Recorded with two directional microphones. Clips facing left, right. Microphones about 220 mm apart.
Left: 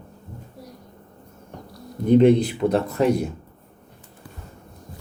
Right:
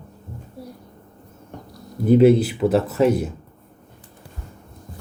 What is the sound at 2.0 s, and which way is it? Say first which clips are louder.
Speech: right 1 dB; 5° right (ahead or behind).